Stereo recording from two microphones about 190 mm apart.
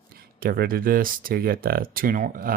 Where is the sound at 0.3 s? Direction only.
50° right (ahead or behind).